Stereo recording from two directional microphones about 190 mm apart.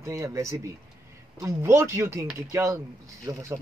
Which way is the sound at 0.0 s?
15° right (ahead or behind).